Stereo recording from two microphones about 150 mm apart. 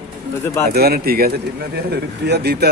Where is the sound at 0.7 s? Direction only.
90° right.